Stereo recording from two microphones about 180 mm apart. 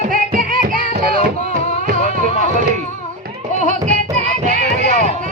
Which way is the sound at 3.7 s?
45° right (ahead or behind).